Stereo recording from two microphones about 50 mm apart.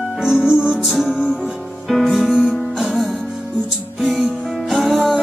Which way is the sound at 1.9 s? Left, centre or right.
Centre.